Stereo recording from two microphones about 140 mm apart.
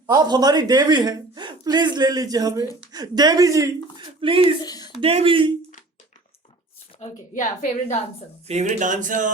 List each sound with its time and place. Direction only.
0.1 s a woman's voice: 30° right (ahead or behind)
3.9 s speech: 40° right (ahead or behind)
4.6 s speech: 30° left (ahead or behind)
4.9 s speech: 40° right (ahead or behind)
6.9 s a sound: 50° left (ahead or behind)
7.3 s a woman's voice: 65° left (ahead or behind)
8.4 s speech: 55° right (ahead or behind)